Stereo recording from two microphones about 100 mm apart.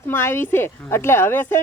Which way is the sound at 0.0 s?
25° left (ahead or behind).